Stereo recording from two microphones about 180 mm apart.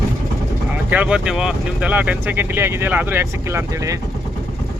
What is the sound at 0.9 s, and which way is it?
Speech, 5° right (ahead or behind).